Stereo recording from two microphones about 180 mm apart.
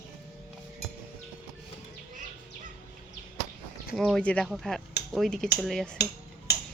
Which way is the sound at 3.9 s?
Centre (ahead or behind).